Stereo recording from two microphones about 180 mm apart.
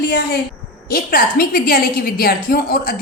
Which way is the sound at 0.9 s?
55° left (ahead or behind).